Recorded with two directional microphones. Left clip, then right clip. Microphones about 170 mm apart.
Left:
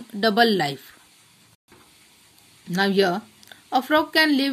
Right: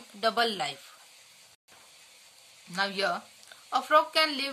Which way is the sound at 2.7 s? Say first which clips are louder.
Left 8 dB; 30° left (ahead or behind).